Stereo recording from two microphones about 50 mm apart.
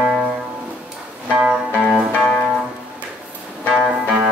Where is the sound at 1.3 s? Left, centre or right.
Right.